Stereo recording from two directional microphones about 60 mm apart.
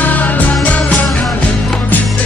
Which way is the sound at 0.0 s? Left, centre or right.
Left.